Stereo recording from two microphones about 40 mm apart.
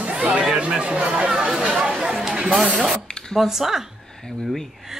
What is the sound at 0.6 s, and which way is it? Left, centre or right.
Speech, right.